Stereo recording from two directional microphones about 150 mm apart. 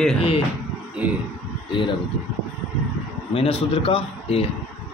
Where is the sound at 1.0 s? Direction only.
10° right (ahead or behind).